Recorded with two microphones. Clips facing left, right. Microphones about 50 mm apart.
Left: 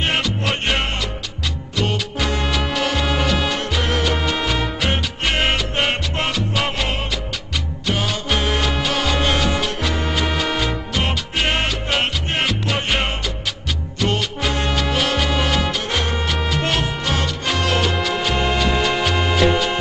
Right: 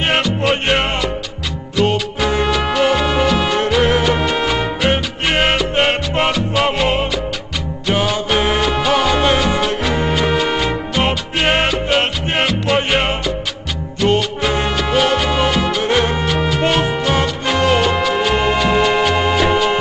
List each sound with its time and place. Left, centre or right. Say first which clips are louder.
0.0 s music: right 5 dB; centre
2.1 s music: right 5 dB; centre
3.1 s music: right 5 dB; centre
3.5 s music: right 7 dB; right
11.9 s music: right 4 dB; centre
14.0 s music: right 6 dB; centre
15.8 s music: right 7 dB; right
16.3 s music: right 5 dB; centre